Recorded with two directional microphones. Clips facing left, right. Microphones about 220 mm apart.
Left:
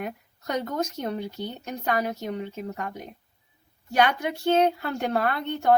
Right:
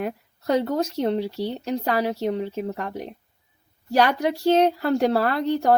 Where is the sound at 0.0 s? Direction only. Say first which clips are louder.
Right 5 dB; 30° right (ahead or behind).